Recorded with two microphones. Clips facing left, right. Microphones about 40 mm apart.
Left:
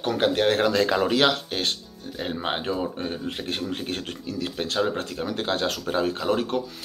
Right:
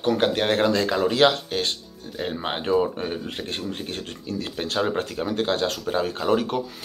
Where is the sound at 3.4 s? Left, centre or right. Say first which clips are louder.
Left 1 dB; centre.